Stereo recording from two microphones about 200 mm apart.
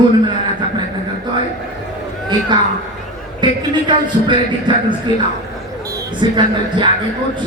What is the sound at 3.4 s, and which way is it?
Speech, 25° right (ahead or behind).